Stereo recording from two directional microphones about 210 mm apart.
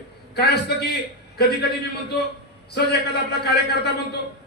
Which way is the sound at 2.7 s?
50° left (ahead or behind).